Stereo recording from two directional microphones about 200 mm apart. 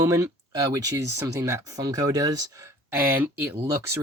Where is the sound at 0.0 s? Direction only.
15° right (ahead or behind).